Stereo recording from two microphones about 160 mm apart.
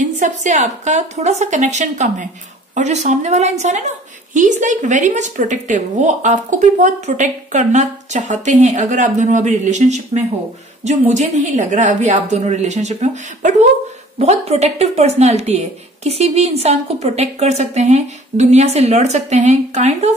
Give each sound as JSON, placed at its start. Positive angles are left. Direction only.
{"t": 0.0, "sound": "a woman's voice", "side_deg": -50}